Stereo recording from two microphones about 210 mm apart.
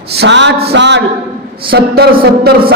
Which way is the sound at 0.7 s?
55° right (ahead or behind).